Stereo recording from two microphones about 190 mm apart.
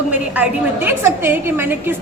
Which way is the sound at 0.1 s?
10° right (ahead or behind).